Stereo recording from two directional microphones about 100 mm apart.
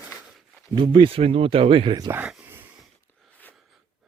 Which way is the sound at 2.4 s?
20° right (ahead or behind).